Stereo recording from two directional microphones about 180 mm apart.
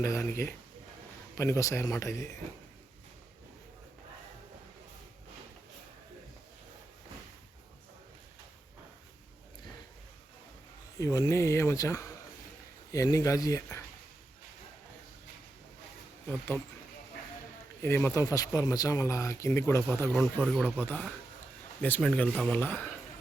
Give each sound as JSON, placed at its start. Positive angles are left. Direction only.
{"t": 0.0, "sound": "speech", "side_deg": 15}
{"t": 11.0, "sound": "speech", "side_deg": 20}
{"t": 17.8, "sound": "speech", "side_deg": 15}
{"t": 20.4, "sound": "speech", "side_deg": 0}
{"t": 20.7, "sound": "speech", "side_deg": 10}